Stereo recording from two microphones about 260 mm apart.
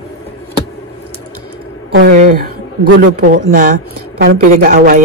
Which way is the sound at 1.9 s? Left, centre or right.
Right.